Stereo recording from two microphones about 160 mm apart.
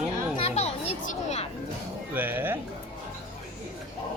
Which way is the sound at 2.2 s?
10° right (ahead or behind).